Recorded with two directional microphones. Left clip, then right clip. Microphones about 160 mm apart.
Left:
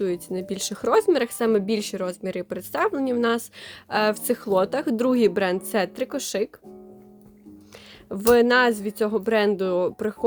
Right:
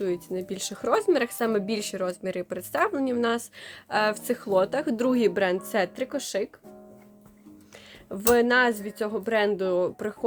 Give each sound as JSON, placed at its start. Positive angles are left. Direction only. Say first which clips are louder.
{"t": 0.0, "sound": "speech", "louder": "left 2 dB", "side_deg": 35}
{"t": 8.1, "sound": "speech", "louder": "left 4 dB", "side_deg": 40}